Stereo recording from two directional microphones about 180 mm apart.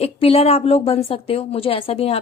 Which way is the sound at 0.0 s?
35° left (ahead or behind).